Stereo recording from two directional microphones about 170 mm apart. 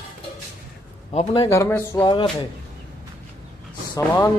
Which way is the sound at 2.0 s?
25° left (ahead or behind).